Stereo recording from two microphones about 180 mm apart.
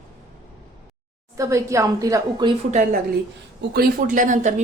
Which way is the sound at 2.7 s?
45° right (ahead or behind).